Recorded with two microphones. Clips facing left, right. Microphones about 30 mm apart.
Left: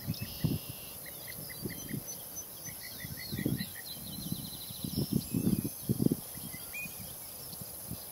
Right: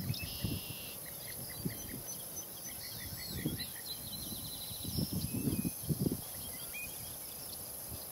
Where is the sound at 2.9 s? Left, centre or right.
Centre.